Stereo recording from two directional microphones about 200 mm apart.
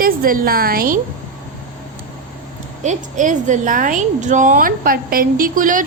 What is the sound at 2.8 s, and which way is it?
A woman's voice, 40° right (ahead or behind).